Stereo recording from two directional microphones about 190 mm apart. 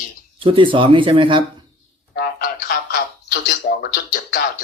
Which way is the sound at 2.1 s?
50° left (ahead or behind).